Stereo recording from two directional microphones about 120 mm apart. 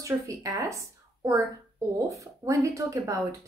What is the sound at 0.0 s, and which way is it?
A woman's voice, 30° right (ahead or behind).